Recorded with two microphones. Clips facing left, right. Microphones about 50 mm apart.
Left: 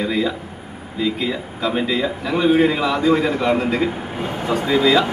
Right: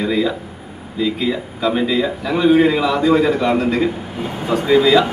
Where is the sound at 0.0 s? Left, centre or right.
Centre.